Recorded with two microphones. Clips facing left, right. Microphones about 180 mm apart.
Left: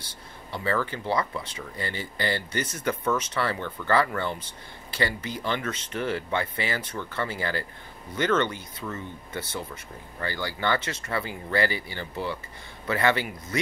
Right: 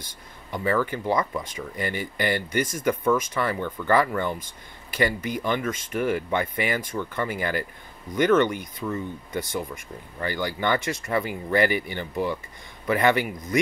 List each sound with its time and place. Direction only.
0.5 s speech: 15° right (ahead or behind)
5.4 s speech: 10° right (ahead or behind)